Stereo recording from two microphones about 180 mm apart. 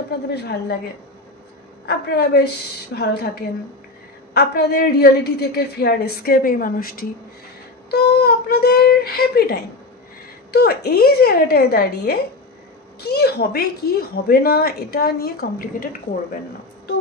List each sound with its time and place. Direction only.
0.3 s a woman's voice: 65° left (ahead or behind)
1.9 s a woman's voice: 60° left (ahead or behind)
4.3 s a woman's voice: 65° left (ahead or behind)